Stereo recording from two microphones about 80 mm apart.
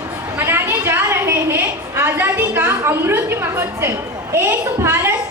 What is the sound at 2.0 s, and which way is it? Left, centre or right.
A woman's voice, right.